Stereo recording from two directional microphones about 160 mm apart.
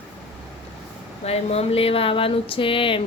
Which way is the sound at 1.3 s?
40° left (ahead or behind).